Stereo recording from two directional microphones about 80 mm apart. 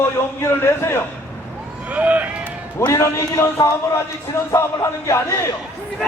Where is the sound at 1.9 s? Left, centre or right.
Right.